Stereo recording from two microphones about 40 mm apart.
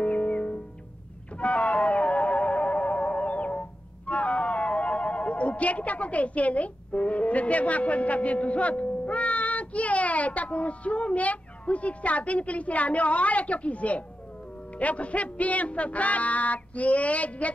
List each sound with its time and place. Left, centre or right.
0.0 s music: left
4.1 s speech: left